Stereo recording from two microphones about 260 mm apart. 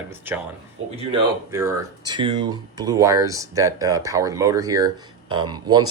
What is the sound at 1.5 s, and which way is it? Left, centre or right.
Speech, centre.